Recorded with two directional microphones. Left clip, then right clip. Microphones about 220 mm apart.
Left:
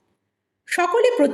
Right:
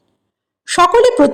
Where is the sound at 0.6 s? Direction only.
30° right (ahead or behind).